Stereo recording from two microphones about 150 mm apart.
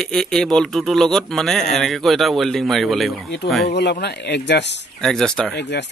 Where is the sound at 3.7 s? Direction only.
90° left.